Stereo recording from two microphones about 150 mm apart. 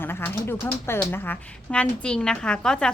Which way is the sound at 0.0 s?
15° left (ahead or behind).